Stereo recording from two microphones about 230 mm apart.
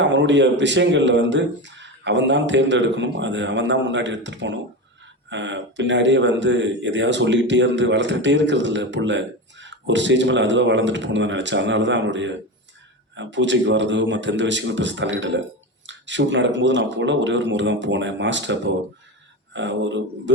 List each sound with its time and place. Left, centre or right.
0.0 s speech: right